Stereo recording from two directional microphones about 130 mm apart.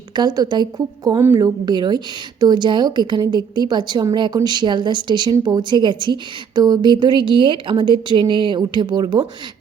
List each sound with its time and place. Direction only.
0.2 s a woman's voice: 35° right (ahead or behind)
1.2 s a woman's voice: 20° right (ahead or behind)